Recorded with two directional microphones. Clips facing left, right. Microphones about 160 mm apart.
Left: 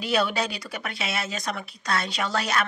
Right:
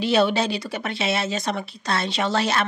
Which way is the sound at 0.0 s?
25° right (ahead or behind).